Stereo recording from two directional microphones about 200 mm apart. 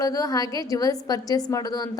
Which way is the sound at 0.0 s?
20° left (ahead or behind).